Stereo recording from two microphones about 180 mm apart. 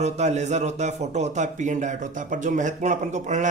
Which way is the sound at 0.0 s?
40° right (ahead or behind).